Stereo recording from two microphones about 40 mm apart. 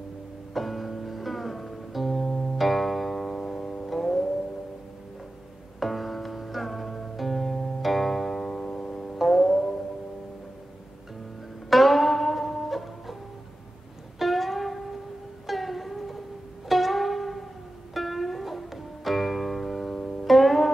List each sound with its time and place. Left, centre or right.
0.6 s music: centre
5.8 s music: centre
11.7 s music: centre
14.1 s music: centre